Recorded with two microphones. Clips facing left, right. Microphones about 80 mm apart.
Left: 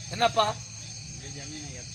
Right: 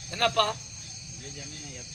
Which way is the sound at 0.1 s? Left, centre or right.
Left.